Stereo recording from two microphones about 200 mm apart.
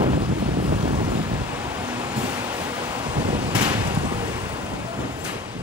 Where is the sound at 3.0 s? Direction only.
25° right (ahead or behind).